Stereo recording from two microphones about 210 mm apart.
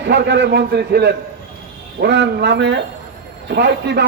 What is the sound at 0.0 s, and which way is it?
A man's voice, 55° right (ahead or behind).